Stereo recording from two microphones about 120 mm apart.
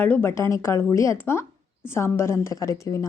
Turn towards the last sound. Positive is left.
turn(degrees=25)  # may be behind; listen again after turning